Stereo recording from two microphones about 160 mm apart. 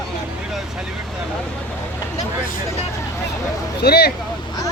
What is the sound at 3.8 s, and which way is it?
Speech, 80° left.